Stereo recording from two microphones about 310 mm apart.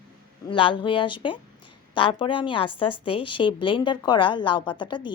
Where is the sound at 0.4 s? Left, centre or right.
Centre.